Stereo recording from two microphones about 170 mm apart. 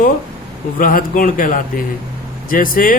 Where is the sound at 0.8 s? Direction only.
55° left (ahead or behind).